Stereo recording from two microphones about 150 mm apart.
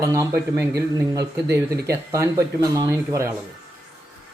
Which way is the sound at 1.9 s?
20° right (ahead or behind).